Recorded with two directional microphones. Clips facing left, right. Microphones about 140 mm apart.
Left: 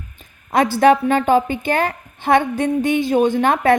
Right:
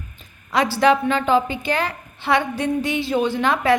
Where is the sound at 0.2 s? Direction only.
50° left (ahead or behind).